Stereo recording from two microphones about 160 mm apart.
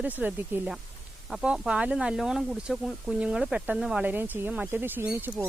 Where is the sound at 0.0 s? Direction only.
10° right (ahead or behind).